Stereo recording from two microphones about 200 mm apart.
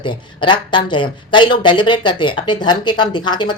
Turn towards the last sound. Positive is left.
turn(degrees=20)  # may be behind; listen again after turning